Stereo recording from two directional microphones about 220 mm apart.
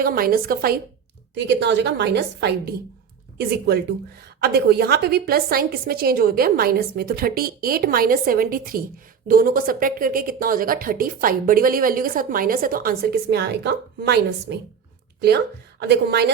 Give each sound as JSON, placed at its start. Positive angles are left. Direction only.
{"t": 0.0, "sound": "a woman's voice", "side_deg": -40}
{"t": 15.8, "sound": "a woman's voice", "side_deg": -50}